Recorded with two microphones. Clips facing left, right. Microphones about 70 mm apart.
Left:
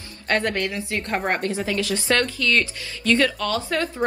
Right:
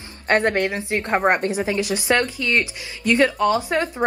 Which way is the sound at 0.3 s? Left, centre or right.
Right.